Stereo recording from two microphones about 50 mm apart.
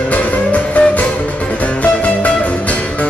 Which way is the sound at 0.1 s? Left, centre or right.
Left.